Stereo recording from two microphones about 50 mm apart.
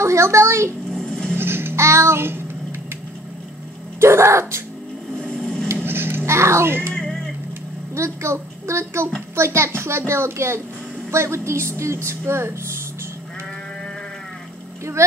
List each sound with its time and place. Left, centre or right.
0.0 s speech: right
1.0 s a sound: left
1.3 s music: right
1.8 s child singing: right
4.0 s a woman's voice: right
5.2 s a sound: centre
5.9 s a sound: right
6.9 s music: centre
7.9 s a woman's voice: right
15.0 s a woman's voice: right